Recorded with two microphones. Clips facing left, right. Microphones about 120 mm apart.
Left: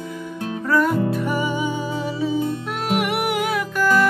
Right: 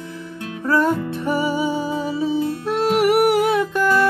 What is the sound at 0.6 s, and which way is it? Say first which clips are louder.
Music: right 1 dB; 30° right (ahead or behind).